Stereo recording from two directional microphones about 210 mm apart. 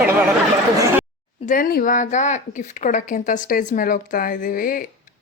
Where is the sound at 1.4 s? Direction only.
40° left (ahead or behind).